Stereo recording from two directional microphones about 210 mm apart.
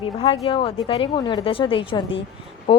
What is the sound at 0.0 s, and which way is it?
Speech, 25° left (ahead or behind).